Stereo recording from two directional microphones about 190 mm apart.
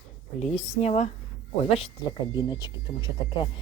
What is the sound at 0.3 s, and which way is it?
Speech, 35° left (ahead or behind).